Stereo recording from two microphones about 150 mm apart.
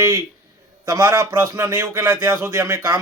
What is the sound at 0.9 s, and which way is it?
Speech, 20° right (ahead or behind).